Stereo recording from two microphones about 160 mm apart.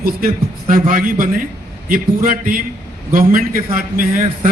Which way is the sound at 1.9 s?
60° right (ahead or behind).